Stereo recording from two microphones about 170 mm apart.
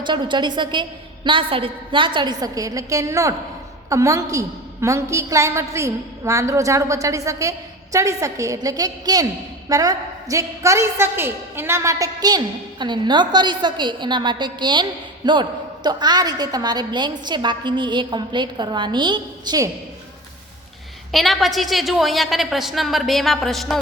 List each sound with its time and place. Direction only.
0.0 s a woman's voice: 25° right (ahead or behind)
21.1 s a woman's voice: centre (ahead or behind)